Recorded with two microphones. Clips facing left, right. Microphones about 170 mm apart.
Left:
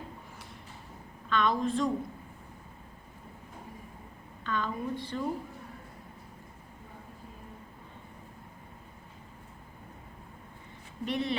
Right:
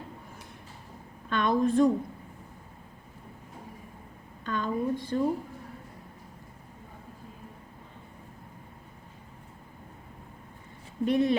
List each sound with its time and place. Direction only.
1.3 s a woman's voice: 50° right (ahead or behind)
4.4 s a woman's voice: 45° right (ahead or behind)
11.0 s speech: 45° right (ahead or behind)